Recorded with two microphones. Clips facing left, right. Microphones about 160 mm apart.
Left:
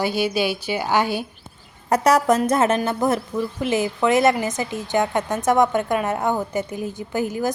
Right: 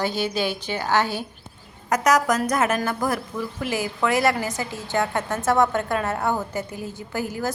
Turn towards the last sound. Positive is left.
turn(degrees=20)  # may be behind; listen again after turning